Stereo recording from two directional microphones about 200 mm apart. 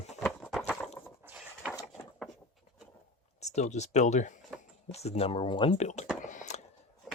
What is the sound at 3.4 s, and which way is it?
Speech, 35° left (ahead or behind).